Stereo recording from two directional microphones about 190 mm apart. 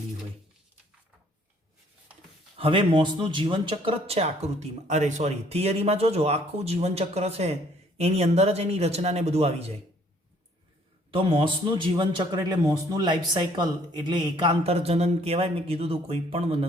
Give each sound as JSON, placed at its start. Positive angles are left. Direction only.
{"t": 2.6, "sound": "speech", "side_deg": -30}
{"t": 11.1, "sound": "a man's voice", "side_deg": -30}